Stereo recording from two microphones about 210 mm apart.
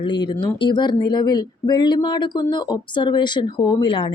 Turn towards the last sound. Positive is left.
turn(degrees=25)  # may be behind; listen again after turning